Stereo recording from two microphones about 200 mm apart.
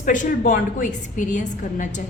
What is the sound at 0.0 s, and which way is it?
A woman's voice, 40° left (ahead or behind).